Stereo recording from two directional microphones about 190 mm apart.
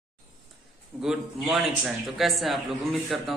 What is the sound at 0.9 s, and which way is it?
A man's voice, 5° right (ahead or behind).